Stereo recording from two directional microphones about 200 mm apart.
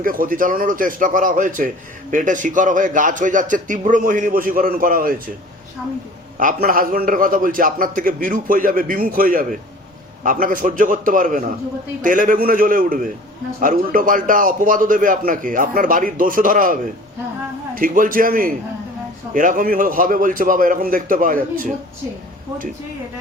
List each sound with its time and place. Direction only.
0.0 s a man's voice: 45° right (ahead or behind)
6.3 s a man's voice: 45° right (ahead or behind)
17.7 s a man's voice: 45° right (ahead or behind)